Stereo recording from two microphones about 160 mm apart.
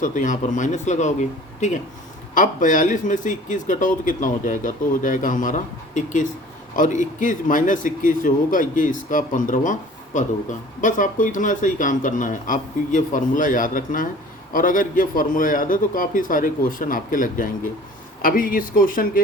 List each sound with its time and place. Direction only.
0.0 s a man's voice: 55° left (ahead or behind)